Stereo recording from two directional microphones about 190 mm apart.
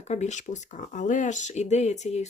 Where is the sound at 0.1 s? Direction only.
40° left (ahead or behind).